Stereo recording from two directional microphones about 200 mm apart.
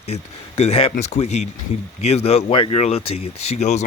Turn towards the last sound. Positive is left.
turn(degrees=35)  # may be behind; listen again after turning